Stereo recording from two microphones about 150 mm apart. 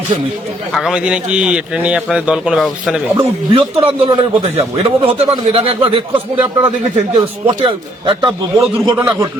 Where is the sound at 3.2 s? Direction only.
40° right (ahead or behind).